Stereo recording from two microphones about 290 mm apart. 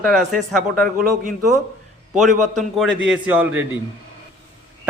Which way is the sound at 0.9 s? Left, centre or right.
Right.